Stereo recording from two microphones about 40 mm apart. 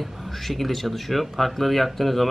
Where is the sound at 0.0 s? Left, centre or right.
Centre.